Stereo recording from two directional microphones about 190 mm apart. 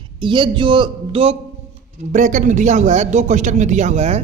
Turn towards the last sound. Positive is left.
turn(degrees=-35)  # may be behind; listen again after turning